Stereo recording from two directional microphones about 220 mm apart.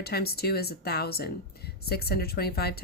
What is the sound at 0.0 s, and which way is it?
Speech, 45° left (ahead or behind).